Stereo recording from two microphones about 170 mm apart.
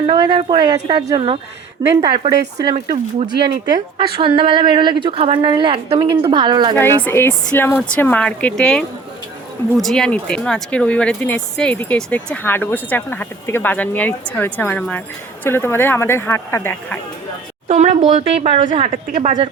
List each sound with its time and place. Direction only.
0.0 s a woman's voice: 25° right (ahead or behind)
3.9 s a woman's voice: 30° right (ahead or behind)
7.0 s speech: 10° left (ahead or behind)
17.7 s speech: 40° right (ahead or behind)